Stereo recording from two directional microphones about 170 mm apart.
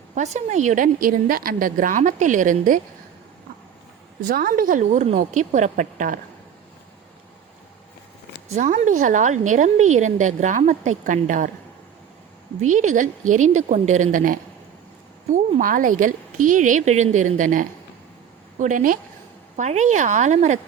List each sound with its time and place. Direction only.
0.1 s a woman's voice: 45° right (ahead or behind)
4.3 s a woman's voice: 55° right (ahead or behind)
8.5 s a woman's voice: 45° right (ahead or behind)
12.7 s a woman's voice: 45° right (ahead or behind)